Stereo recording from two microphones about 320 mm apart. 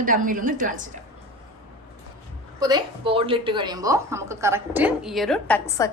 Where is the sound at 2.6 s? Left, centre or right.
Centre.